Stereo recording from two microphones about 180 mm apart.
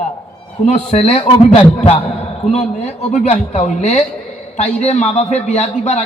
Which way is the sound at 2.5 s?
35° left (ahead or behind).